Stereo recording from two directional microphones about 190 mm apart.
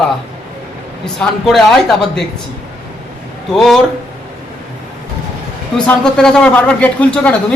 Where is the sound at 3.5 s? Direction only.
Centre (ahead or behind).